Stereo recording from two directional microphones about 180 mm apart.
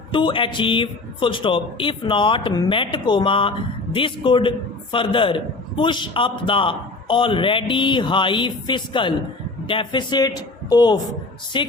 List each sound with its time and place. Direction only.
0.1 s a man's voice: 25° left (ahead or behind)